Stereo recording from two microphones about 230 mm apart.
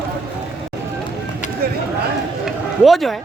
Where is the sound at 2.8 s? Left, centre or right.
Centre.